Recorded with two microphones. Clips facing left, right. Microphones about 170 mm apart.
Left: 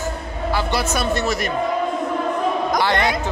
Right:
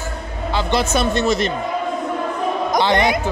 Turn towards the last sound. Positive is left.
turn(degrees=-15)  # may be behind; listen again after turning